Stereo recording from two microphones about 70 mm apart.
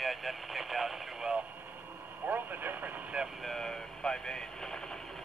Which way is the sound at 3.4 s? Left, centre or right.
Centre.